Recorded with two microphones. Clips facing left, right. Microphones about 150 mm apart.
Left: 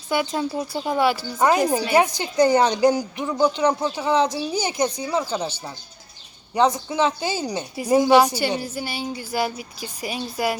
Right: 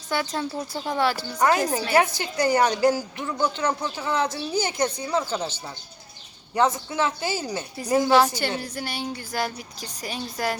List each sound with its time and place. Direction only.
0.1 s a woman's voice: 15° left (ahead or behind)